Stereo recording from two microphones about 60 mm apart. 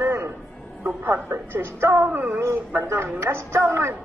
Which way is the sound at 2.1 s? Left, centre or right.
Right.